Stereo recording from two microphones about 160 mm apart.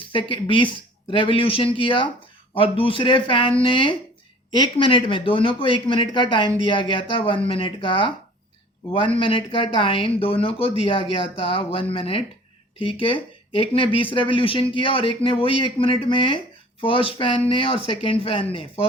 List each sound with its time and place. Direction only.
0.1 s speech: 30° left (ahead or behind)
9.1 s speech: 35° left (ahead or behind)